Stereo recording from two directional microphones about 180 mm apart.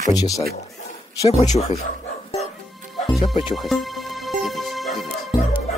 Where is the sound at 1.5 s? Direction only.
35° left (ahead or behind).